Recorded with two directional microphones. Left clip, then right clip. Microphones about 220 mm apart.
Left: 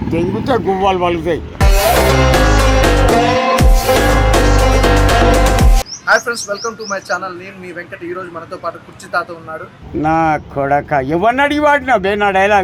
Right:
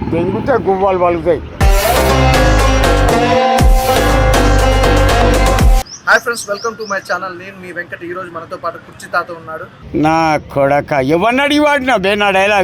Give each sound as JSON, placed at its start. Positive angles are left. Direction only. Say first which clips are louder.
{"t": 0.1, "sound": "speech", "louder": "right 2 dB", "side_deg": 40}
{"t": 0.9, "sound": "speech", "louder": "right 3 dB", "side_deg": 65}
{"t": 1.5, "sound": "music", "louder": "even", "side_deg": 0}
{"t": 9.1, "sound": "speech", "louder": "right 1 dB", "side_deg": 0}
{"t": 10.0, "sound": "speech", "louder": "right 1 dB", "side_deg": -40}